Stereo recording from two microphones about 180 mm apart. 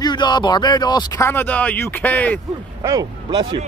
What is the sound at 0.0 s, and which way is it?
Speech, 25° left (ahead or behind).